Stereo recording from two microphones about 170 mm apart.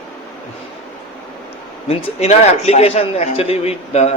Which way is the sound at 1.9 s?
35° left (ahead or behind).